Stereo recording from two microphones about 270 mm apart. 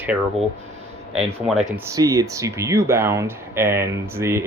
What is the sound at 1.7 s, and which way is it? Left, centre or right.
Speech, centre.